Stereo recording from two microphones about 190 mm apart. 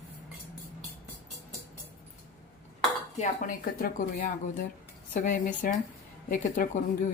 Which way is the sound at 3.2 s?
45° left (ahead or behind).